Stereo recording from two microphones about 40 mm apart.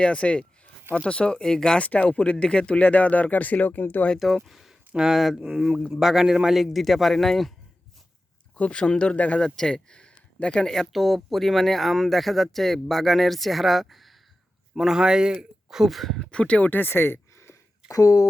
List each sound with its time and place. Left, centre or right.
0.0 s speech: left
2.0 s speech: left
4.2 s speech: centre
6.5 s speech: centre
8.5 s speech: left
9.1 s speech: left
9.4 s speech: centre
10.7 s speech: centre
14.8 s speech: centre
15.9 s speech: centre
16.2 s speech: left
16.6 s speech: left
16.9 s a sound: left